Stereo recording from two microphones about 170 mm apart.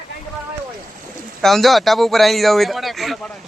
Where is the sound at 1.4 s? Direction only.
Centre (ahead or behind).